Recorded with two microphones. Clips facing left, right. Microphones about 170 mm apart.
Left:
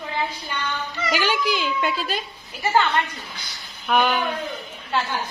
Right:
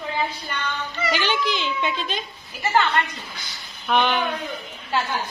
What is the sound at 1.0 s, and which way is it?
Speech, 5° left (ahead or behind).